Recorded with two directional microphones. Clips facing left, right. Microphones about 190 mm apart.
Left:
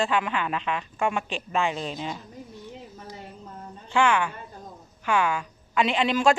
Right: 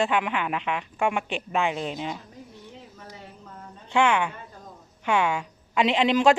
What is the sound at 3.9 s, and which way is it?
A woman's voice, 20° right (ahead or behind).